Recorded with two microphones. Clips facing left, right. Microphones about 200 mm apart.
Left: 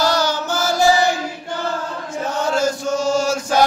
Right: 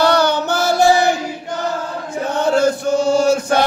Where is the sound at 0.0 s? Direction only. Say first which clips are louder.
Right 4 dB; 60° right (ahead or behind).